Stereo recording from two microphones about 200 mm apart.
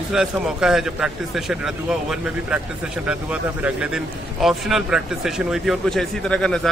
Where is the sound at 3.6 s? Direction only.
5° right (ahead or behind).